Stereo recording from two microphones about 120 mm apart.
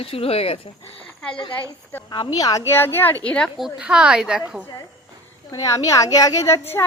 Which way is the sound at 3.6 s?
5° right (ahead or behind).